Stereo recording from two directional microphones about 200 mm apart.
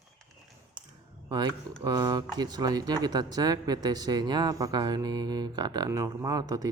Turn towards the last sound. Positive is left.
turn(degrees=-20)  # may be behind; listen again after turning